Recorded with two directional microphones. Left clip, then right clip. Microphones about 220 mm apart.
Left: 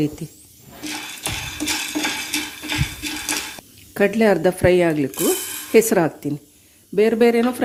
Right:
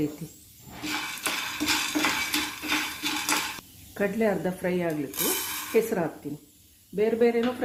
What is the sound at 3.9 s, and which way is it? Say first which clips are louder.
Speech: left 9 dB; 45° left (ahead or behind).